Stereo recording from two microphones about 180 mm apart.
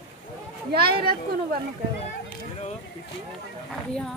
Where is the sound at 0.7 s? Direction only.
55° right (ahead or behind).